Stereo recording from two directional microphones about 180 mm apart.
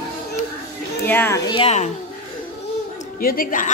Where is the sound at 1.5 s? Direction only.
35° left (ahead or behind).